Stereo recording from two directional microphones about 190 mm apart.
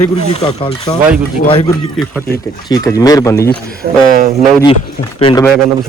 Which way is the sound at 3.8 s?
45° right (ahead or behind).